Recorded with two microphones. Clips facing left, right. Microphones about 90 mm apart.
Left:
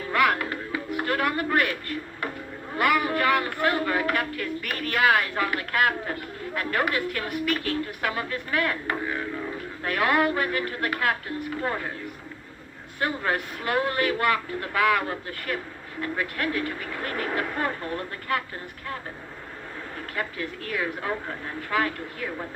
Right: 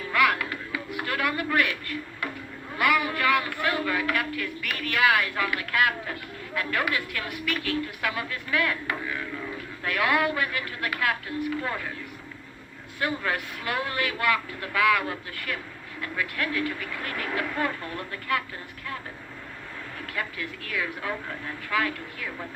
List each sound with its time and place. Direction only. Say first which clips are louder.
0.0 s music: left 1 dB; 35° left (ahead or behind)
2.7 s speech: left 2 dB; 35° left (ahead or behind)
13.0 s speech: left 2 dB; 35° left (ahead or behind)
20.0 s speech: left 2 dB; 35° left (ahead or behind)